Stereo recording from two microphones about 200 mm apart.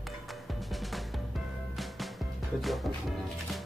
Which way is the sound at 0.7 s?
Centre (ahead or behind).